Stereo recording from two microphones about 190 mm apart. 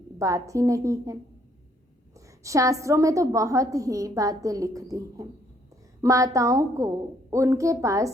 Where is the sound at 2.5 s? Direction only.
15° right (ahead or behind).